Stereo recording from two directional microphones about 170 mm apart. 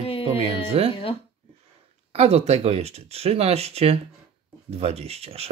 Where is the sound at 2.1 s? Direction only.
40° right (ahead or behind).